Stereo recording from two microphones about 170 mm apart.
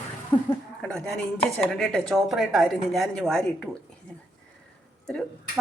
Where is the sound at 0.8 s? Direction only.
5° left (ahead or behind).